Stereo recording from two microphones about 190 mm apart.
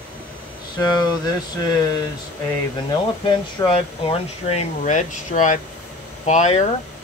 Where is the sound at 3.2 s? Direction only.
30° left (ahead or behind).